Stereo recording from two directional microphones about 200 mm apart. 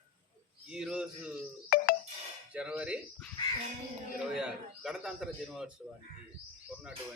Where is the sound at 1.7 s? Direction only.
45° left (ahead or behind).